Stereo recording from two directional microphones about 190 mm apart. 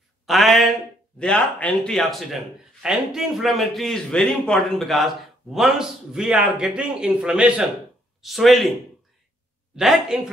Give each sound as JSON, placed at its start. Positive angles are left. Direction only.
{"t": 0.3, "sound": "speech", "side_deg": 0}
{"t": 9.8, "sound": "speech", "side_deg": 0}